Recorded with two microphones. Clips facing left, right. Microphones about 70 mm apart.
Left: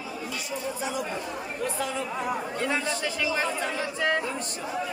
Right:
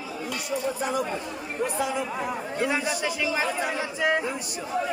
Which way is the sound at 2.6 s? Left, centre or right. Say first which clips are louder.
Right 6 dB; centre.